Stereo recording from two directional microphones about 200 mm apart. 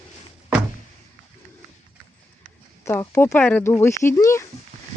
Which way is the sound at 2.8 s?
15° left (ahead or behind).